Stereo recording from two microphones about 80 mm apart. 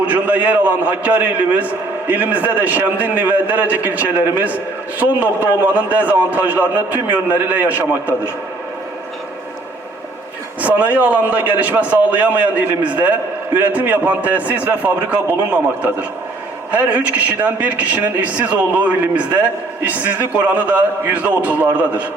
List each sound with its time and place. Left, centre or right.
0.0 s a man's voice: right
10.6 s a man's voice: centre